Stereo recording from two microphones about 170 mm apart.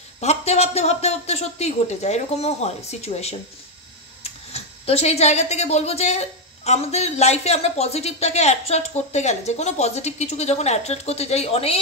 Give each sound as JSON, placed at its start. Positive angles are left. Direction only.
{"t": 0.2, "sound": "speech", "side_deg": 40}